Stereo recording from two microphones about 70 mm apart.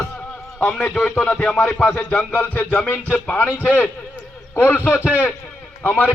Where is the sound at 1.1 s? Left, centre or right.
Centre.